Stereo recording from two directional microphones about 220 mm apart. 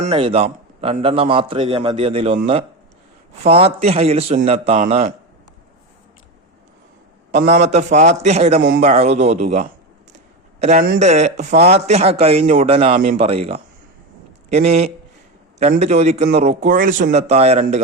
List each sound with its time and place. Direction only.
0.0 s a man's voice: 25° right (ahead or behind)
7.3 s a man's voice: 30° right (ahead or behind)